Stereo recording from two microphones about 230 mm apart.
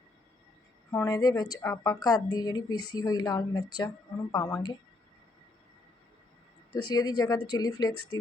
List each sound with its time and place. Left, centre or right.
0.9 s a woman's voice: centre
6.9 s a woman's voice: centre